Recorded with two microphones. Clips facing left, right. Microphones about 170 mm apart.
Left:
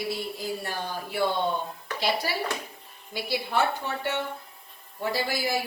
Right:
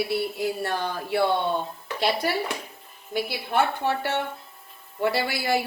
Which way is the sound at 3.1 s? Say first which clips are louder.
Right 2 dB; 60° right (ahead or behind).